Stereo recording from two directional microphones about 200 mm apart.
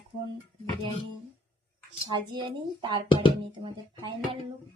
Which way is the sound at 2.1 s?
25° right (ahead or behind).